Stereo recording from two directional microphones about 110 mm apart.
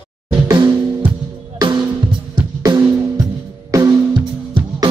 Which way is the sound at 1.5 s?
35° right (ahead or behind).